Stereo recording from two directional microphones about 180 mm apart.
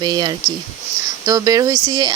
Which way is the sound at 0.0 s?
25° right (ahead or behind).